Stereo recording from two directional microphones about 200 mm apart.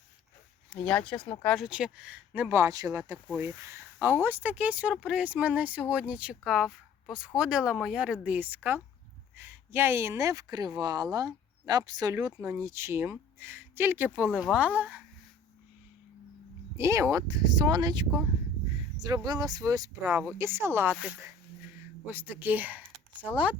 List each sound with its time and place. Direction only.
0.7 s speech: 5° left (ahead or behind); by 14.3 s 10° right (ahead or behind)
14.3 s speech: centre (ahead or behind)
16.7 s speech: 15° right (ahead or behind)